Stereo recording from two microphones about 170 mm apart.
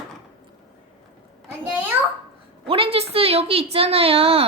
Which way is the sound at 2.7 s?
35° right (ahead or behind).